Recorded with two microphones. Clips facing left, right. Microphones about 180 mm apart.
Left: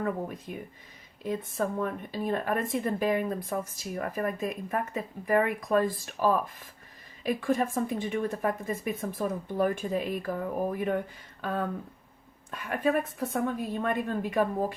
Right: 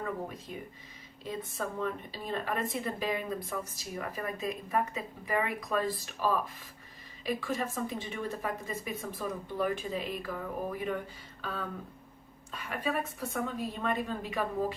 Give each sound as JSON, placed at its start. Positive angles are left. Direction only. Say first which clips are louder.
{"t": 0.0, "sound": "a woman's voice", "louder": "left 5 dB", "side_deg": 55}
{"t": 1.5, "sound": "a woman's voice", "louder": "left 3 dB", "side_deg": 50}
{"t": 12.5, "sound": "a woman's voice", "louder": "left 7 dB", "side_deg": 50}